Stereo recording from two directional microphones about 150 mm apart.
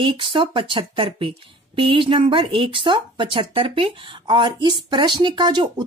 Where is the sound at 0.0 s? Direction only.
35° right (ahead or behind).